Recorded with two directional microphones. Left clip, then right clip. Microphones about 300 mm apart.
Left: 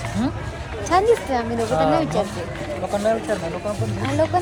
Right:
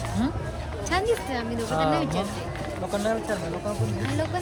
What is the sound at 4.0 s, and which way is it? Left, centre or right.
Speech, centre.